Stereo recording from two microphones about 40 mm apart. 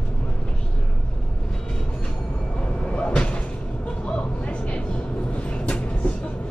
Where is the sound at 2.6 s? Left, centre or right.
Left.